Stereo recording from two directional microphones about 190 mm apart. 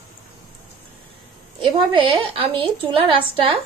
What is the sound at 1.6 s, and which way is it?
A woman's voice, 25° right (ahead or behind).